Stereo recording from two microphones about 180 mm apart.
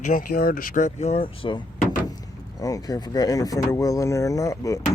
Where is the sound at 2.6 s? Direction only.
20° left (ahead or behind).